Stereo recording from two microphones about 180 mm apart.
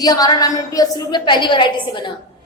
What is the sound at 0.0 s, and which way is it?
A woman's voice, 20° left (ahead or behind).